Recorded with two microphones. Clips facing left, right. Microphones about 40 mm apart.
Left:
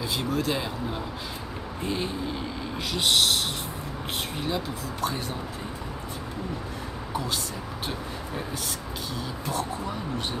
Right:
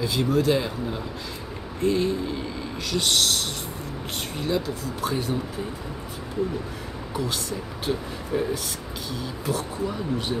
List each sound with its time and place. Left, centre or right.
0.0 s speech: centre
1.8 s speech: centre
9.5 s speech: centre